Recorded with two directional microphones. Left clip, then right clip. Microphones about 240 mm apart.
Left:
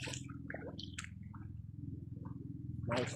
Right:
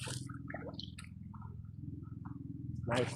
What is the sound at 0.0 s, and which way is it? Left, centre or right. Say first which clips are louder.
Squish: even; centre.